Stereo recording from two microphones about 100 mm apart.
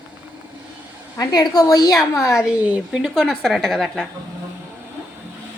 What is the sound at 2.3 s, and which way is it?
A woman's voice, 10° right (ahead or behind).